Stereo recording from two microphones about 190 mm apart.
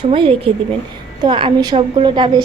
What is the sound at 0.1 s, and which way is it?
A woman's voice, 30° right (ahead or behind).